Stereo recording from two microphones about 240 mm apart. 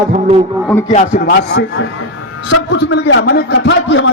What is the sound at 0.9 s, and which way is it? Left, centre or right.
A man's voice, left.